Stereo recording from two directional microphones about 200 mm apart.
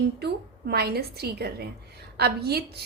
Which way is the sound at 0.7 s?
55° right (ahead or behind).